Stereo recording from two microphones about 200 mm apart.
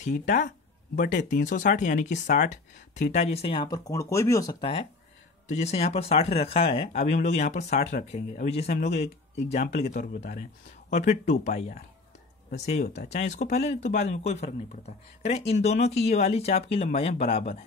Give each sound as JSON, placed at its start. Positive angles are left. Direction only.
{"t": 0.0, "sound": "speech", "side_deg": 40}
{"t": 4.6, "sound": "speech", "side_deg": 30}